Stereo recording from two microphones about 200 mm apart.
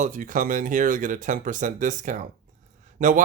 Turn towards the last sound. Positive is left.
turn(degrees=-40)  # may be behind; listen again after turning